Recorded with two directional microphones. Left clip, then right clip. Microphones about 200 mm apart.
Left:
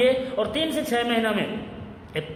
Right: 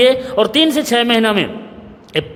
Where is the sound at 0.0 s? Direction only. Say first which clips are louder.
Right 9 dB; 50° right (ahead or behind).